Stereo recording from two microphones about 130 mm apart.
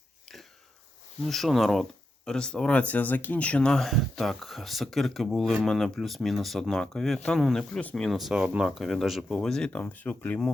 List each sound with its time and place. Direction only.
1.2 s speech: centre (ahead or behind)